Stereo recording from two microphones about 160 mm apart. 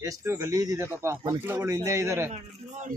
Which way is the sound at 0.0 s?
20° right (ahead or behind).